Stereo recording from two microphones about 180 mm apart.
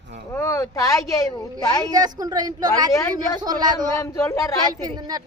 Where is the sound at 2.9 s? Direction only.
15° left (ahead or behind).